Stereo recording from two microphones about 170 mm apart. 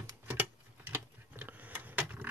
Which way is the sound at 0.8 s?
10° right (ahead or behind).